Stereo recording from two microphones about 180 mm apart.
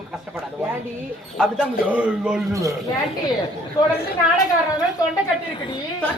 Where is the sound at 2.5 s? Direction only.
15° right (ahead or behind).